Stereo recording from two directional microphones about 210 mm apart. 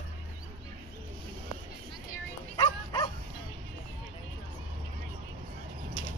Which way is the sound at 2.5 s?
20° left (ahead or behind).